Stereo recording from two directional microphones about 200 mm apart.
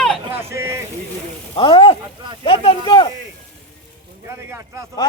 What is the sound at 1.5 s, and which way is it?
Speech, 25° left (ahead or behind).